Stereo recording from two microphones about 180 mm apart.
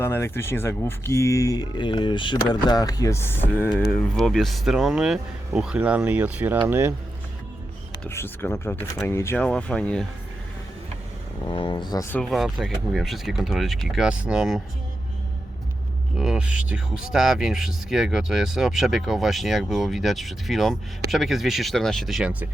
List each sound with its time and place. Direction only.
0.0 s speech: 15° left (ahead or behind); by 6.9 s 10° right (ahead or behind)
8.0 s speech: 15° left (ahead or behind)
11.4 s speech: 30° left (ahead or behind); by 12.3 s 10° left (ahead or behind)
12.3 s speech: centre (ahead or behind)
16.1 s speech: 5° right (ahead or behind)